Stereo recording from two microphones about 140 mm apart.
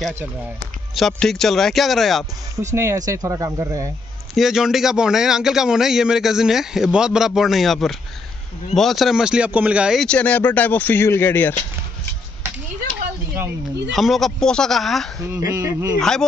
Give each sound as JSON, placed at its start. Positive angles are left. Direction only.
{"t": 0.9, "sound": "a man's voice", "side_deg": 0}
{"t": 2.7, "sound": "speech", "side_deg": -20}
{"t": 4.4, "sound": "a man's voice", "side_deg": -5}
{"t": 10.0, "sound": "speech", "side_deg": 10}
{"t": 13.9, "sound": "a man's voice", "side_deg": 0}
{"t": 15.3, "sound": "speech", "side_deg": -20}
{"t": 16.0, "sound": "a man's voice", "side_deg": 5}